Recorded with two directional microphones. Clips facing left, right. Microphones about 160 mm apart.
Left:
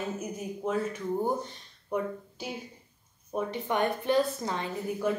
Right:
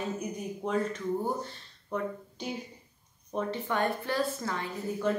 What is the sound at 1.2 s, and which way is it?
Speech, 15° left (ahead or behind).